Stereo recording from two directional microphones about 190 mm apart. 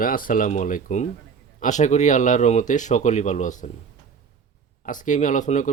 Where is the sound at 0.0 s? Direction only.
45° left (ahead or behind).